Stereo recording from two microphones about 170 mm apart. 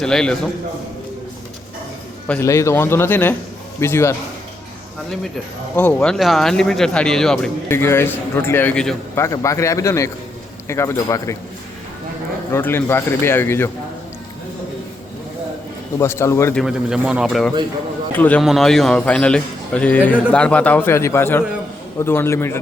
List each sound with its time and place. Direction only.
0.0 s speech: 5° left (ahead or behind)
2.4 s a man's voice: 15° left (ahead or behind)
5.7 s speech: 5° left (ahead or behind)
7.7 s a man's voice: 15° left (ahead or behind)
9.1 s a man's voice: 15° left (ahead or behind)
12.5 s a man's voice: 15° left (ahead or behind)
16.0 s a man's voice: 15° left (ahead or behind)
16.6 s a man's voice: 5° right (ahead or behind); by 22.5 s 15° left (ahead or behind)